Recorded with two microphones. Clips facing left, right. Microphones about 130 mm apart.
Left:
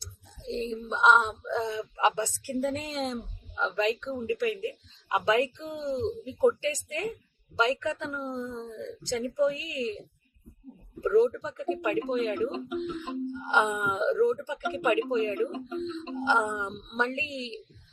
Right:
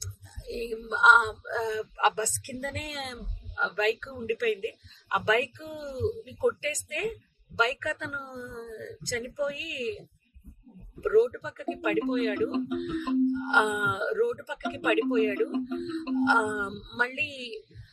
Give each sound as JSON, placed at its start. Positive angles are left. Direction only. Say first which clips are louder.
{"t": 0.0, "sound": "speech", "louder": "left 2 dB", "side_deg": 25}
{"t": 11.0, "sound": "speech", "louder": "even", "side_deg": 25}